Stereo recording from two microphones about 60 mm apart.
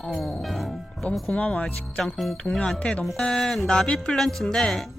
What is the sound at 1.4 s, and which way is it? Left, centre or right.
Speech, left.